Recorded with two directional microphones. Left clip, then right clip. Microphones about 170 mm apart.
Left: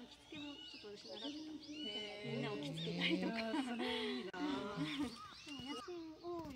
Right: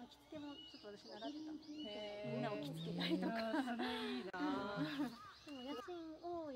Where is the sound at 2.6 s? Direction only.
10° right (ahead or behind).